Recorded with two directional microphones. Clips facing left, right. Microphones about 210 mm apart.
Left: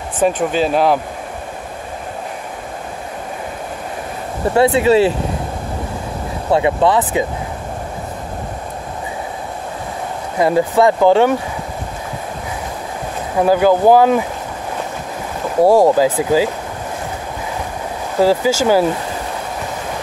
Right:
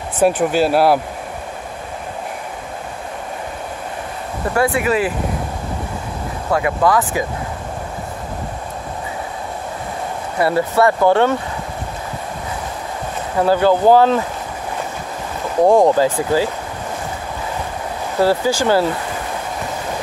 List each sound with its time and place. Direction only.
0.4 s speech: 5° right (ahead or behind)
4.6 s speech: 25° left (ahead or behind)
6.5 s speech: 25° left (ahead or behind)
10.4 s speech: 15° left (ahead or behind)
13.4 s speech: 10° left (ahead or behind)
15.6 s speech: 5° left (ahead or behind)
18.2 s speech: 10° left (ahead or behind)